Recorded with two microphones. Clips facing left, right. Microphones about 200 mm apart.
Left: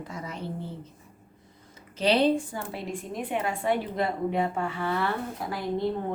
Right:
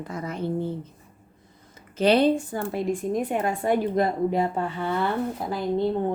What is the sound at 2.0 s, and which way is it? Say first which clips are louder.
A woman's voice: right 3 dB; 50° right (ahead or behind).